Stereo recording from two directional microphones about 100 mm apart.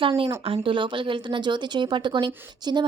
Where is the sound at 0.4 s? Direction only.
65° right (ahead or behind).